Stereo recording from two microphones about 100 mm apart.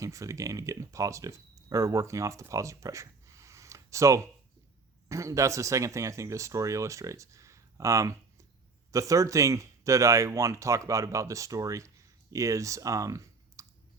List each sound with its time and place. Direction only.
0.0 s speech: 35° right (ahead or behind)